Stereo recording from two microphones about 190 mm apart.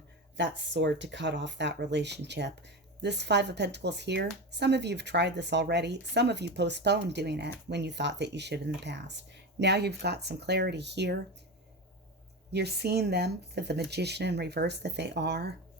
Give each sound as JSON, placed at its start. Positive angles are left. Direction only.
{"t": 0.3, "sound": "speech", "side_deg": -70}
{"t": 12.5, "sound": "speech", "side_deg": -60}